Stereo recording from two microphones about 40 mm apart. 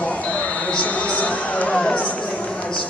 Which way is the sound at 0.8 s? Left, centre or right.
Left.